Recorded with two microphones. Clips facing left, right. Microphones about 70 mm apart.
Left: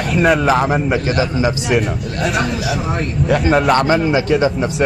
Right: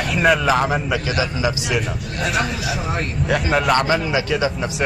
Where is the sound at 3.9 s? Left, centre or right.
Left.